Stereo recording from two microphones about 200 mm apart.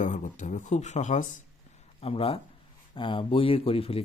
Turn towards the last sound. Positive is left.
turn(degrees=30)  # may be behind; listen again after turning